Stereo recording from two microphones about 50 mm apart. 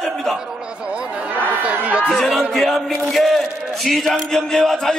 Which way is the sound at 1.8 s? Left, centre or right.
Right.